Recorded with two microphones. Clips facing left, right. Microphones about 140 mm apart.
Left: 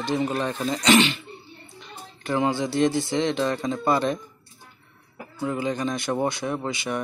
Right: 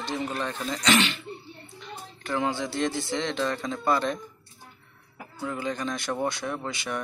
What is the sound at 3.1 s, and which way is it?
Speech, 15° left (ahead or behind).